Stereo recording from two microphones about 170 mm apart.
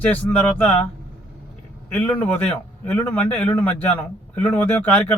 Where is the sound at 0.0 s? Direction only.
10° left (ahead or behind).